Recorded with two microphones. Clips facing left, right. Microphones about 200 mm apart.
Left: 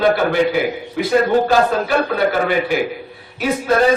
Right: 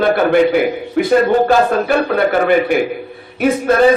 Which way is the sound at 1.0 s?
55° right (ahead or behind).